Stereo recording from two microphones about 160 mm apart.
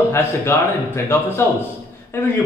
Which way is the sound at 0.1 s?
15° left (ahead or behind).